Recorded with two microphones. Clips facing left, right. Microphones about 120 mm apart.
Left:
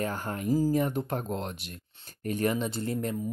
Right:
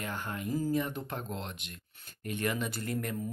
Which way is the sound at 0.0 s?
40° left (ahead or behind).